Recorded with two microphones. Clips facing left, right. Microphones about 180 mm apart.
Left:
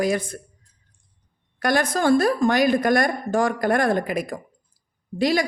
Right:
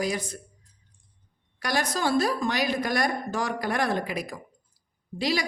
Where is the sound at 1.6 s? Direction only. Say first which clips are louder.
Left 6 dB; 50° left (ahead or behind).